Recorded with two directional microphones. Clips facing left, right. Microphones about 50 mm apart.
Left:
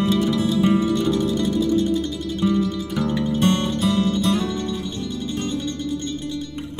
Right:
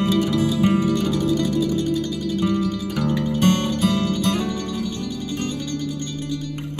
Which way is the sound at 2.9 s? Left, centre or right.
Left.